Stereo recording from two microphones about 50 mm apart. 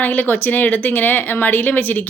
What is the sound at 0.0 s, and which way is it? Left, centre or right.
A woman's voice, left.